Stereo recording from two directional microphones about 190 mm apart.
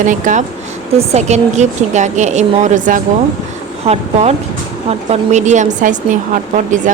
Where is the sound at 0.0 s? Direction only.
40° right (ahead or behind).